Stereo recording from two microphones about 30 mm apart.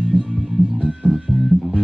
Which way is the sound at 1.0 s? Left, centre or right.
Right.